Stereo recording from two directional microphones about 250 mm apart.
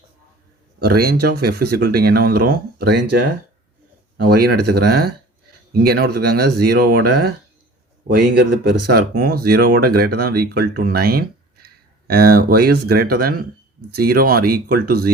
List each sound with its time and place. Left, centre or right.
0.8 s speech: right
4.2 s speech: right